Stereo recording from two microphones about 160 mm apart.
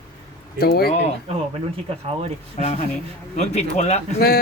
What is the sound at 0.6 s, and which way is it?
Speech, 75° left (ahead or behind).